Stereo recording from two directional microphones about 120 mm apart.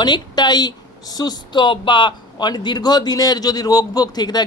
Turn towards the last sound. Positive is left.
turn(degrees=35)  # may be behind; listen again after turning